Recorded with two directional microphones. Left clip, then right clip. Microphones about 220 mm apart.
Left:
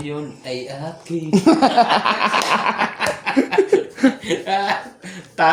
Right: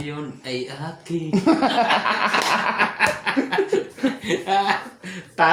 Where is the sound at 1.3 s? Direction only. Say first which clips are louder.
Left 5 dB; 40° left (ahead or behind).